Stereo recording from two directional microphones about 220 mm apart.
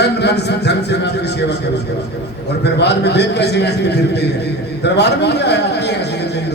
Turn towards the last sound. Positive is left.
turn(degrees=50)  # may be behind; listen again after turning